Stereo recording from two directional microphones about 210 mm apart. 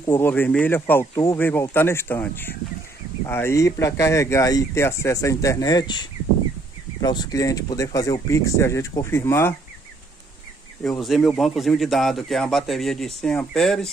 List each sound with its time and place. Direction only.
0.0 s speech: 10° left (ahead or behind)
10.8 s a man's voice: centre (ahead or behind)